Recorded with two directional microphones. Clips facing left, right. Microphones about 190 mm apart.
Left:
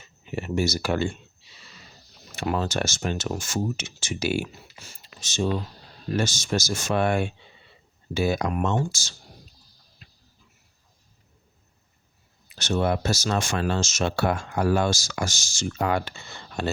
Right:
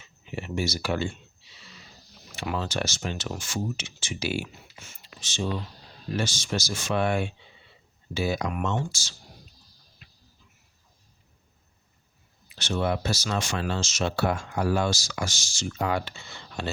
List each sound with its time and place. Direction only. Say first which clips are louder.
0.0 s speech: left 4 dB; 45° left (ahead or behind)
2.3 s speech: left 4 dB; 45° left (ahead or behind)
12.5 s speech: left 3 dB; 45° left (ahead or behind)